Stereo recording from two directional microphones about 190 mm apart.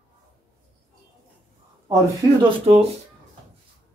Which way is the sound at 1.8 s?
20° right (ahead or behind).